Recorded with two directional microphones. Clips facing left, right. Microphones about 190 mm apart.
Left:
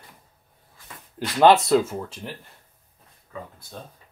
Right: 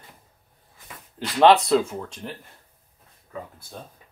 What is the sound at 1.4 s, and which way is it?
Speech, centre (ahead or behind).